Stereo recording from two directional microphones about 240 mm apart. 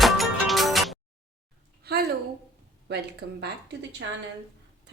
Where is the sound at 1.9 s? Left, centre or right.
Right.